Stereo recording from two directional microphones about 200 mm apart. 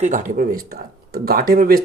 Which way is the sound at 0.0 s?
40° right (ahead or behind).